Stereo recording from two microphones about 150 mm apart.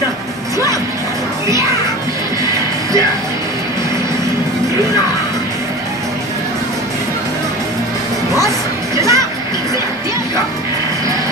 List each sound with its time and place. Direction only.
8.3 s music: 20° right (ahead or behind)